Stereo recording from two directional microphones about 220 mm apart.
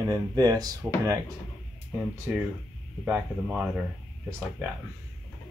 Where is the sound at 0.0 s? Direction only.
15° right (ahead or behind).